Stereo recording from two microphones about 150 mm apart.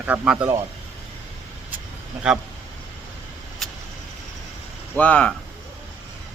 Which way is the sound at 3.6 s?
Centre (ahead or behind).